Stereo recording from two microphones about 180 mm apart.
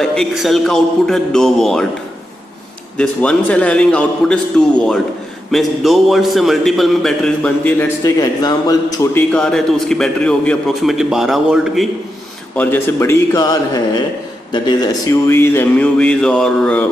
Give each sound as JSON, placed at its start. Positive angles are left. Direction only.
{"t": 0.0, "sound": "a man's voice", "side_deg": 5}
{"t": 3.0, "sound": "a man's voice", "side_deg": 5}
{"t": 8.0, "sound": "speech", "side_deg": 20}
{"t": 9.3, "sound": "a man's voice", "side_deg": 5}
{"t": 12.5, "sound": "a man's voice", "side_deg": 15}
{"t": 15.2, "sound": "a man's voice", "side_deg": 10}